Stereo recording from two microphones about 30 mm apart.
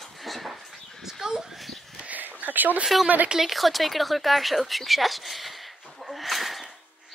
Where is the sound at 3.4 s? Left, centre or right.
Centre.